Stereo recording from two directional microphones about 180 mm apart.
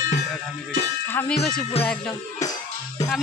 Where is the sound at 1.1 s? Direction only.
10° left (ahead or behind).